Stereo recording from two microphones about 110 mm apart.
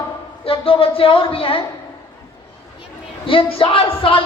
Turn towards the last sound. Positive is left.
turn(degrees=55)  # may be behind; listen again after turning